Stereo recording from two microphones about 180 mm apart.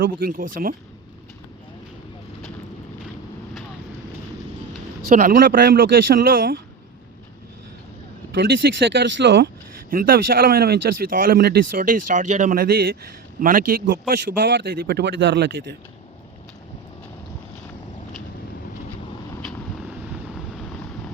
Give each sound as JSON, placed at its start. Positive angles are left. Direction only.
{"t": 0.0, "sound": "speech", "side_deg": -50}
{"t": 5.0, "sound": "speech", "side_deg": -45}
{"t": 8.9, "sound": "speech", "side_deg": -90}
{"t": 9.9, "sound": "speech", "side_deg": -55}